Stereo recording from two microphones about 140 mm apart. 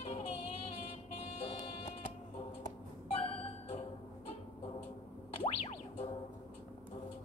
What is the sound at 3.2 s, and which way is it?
Music, 40° left (ahead or behind).